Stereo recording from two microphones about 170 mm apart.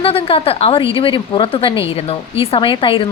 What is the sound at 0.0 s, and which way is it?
A woman's voice, 35° left (ahead or behind).